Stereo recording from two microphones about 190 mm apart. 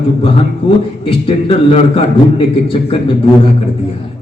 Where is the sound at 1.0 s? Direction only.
30° left (ahead or behind).